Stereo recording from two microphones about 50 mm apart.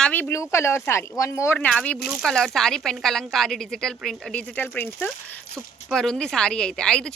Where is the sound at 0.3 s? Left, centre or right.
Left.